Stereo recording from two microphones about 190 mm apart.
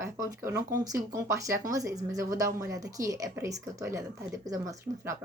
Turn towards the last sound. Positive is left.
turn(degrees=-20)  # may be behind; listen again after turning